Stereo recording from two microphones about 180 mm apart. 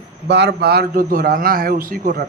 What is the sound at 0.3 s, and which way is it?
A man's voice, 70° right (ahead or behind).